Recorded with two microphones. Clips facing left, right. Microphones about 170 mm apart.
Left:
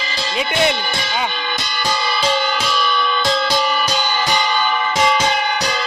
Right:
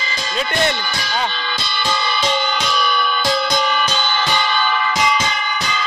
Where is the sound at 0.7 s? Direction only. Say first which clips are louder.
Left 2 dB; 25° left (ahead or behind).